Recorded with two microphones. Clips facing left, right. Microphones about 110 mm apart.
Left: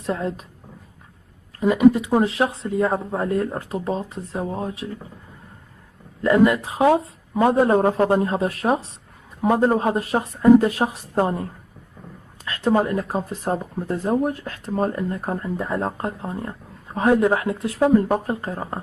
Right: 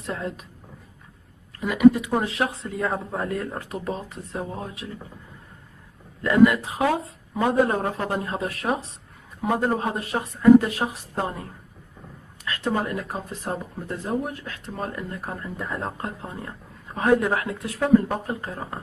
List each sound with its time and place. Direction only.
0.0 s speech: 30° left (ahead or behind)
1.6 s speech: 30° left (ahead or behind)
6.2 s speech: 25° left (ahead or behind)
12.4 s speech: 35° left (ahead or behind)